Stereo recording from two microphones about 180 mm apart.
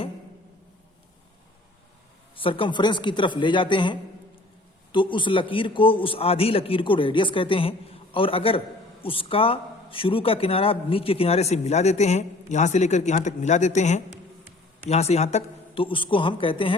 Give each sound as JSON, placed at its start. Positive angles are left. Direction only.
{"t": 2.3, "sound": "a man's voice", "side_deg": 30}